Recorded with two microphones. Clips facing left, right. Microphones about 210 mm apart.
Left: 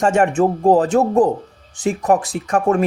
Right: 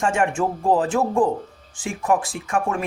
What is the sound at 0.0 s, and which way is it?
Speech, 40° left (ahead or behind).